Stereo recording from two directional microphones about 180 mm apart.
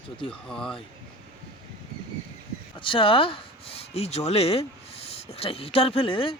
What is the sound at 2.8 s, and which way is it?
Speech, 30° left (ahead or behind).